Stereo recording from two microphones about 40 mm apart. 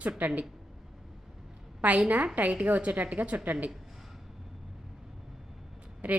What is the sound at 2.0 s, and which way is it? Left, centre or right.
A woman's voice, right.